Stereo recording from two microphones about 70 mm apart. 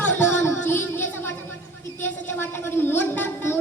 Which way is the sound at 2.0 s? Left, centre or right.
Left.